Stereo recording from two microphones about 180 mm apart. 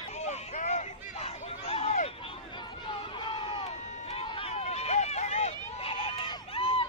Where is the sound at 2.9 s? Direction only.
25° left (ahead or behind).